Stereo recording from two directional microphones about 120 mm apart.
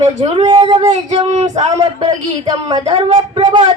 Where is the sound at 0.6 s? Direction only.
55° right (ahead or behind).